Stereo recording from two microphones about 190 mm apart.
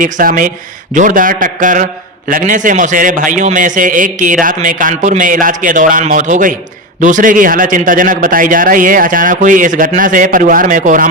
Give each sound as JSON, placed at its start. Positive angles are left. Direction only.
{"t": 0.0, "sound": "a man's voice", "side_deg": -45}